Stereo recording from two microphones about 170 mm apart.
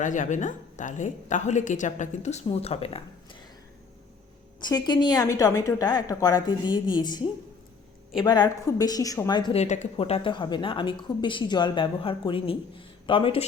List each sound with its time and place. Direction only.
0.0 s a woman's voice: 50° left (ahead or behind)
4.6 s speech: 25° left (ahead or behind)
9.6 s speech: 40° left (ahead or behind)